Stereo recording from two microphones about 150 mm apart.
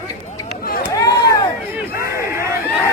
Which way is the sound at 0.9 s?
25° left (ahead or behind).